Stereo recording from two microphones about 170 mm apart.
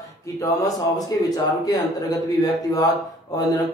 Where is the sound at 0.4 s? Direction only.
20° left (ahead or behind).